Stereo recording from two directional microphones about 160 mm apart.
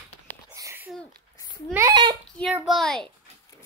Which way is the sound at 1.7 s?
20° right (ahead or behind).